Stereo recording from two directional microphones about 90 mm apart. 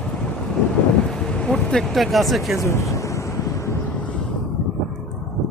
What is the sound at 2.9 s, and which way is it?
Wind noise, 35° left (ahead or behind).